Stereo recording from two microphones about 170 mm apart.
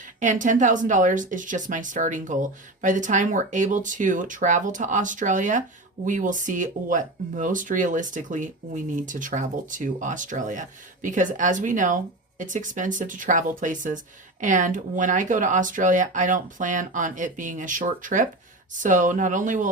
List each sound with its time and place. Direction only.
0.0 s speech: 50° right (ahead or behind)